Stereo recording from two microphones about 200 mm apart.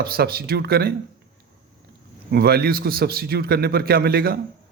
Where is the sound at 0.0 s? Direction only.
50° right (ahead or behind).